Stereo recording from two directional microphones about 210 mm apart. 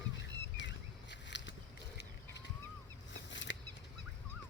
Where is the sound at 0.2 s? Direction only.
60° left (ahead or behind).